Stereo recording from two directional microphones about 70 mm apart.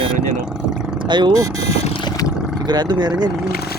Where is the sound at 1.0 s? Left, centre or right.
Right.